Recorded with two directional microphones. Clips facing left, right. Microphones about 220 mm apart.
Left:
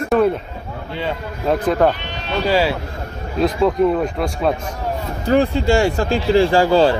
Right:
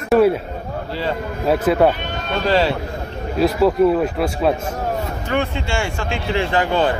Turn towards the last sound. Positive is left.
turn(degrees=30)  # may be behind; listen again after turning